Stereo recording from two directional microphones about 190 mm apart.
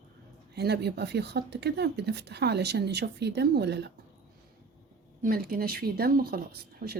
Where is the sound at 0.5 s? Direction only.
60° right (ahead or behind).